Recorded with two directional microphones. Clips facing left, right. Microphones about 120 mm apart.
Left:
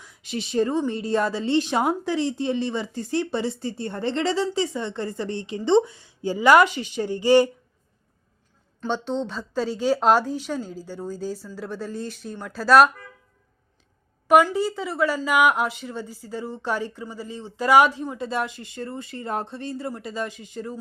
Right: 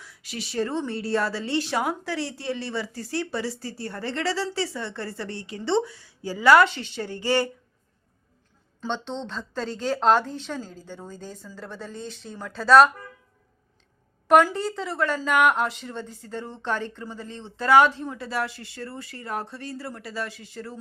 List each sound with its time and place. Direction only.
0.0 s a woman's voice: 20° left (ahead or behind)
8.9 s speech: 5° left (ahead or behind)
14.3 s speech: 5° left (ahead or behind)